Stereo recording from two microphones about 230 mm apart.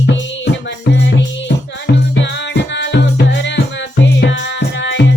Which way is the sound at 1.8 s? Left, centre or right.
Left.